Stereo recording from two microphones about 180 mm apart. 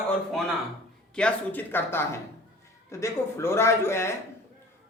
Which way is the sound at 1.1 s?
10° left (ahead or behind).